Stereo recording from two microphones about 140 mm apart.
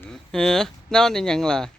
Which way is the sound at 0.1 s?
5° left (ahead or behind).